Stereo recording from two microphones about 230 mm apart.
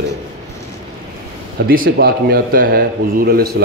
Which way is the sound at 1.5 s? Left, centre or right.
Right.